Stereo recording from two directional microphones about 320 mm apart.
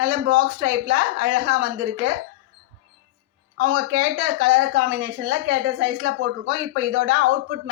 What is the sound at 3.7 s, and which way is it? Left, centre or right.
Speech, right.